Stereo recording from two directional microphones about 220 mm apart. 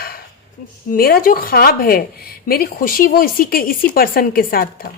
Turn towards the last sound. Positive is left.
turn(degrees=40)  # may be behind; listen again after turning